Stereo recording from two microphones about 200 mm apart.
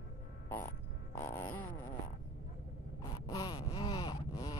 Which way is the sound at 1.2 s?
10° left (ahead or behind).